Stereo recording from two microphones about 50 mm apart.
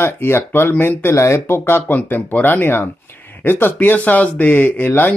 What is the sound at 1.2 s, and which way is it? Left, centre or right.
Speech, left.